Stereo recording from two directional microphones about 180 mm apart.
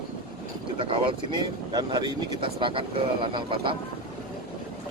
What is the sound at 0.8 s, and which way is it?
Speech, 30° right (ahead or behind).